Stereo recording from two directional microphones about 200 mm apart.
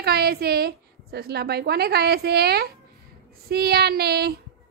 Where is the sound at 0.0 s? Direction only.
50° right (ahead or behind).